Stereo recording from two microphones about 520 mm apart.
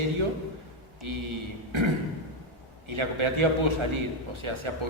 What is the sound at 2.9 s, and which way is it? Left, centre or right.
A man's voice, right.